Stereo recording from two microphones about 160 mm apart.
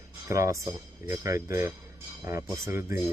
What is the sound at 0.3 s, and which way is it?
Speech, 20° right (ahead or behind).